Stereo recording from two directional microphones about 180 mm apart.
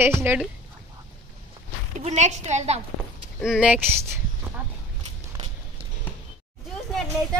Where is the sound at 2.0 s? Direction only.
40° right (ahead or behind).